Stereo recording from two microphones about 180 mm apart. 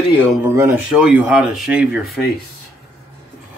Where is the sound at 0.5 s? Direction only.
15° right (ahead or behind).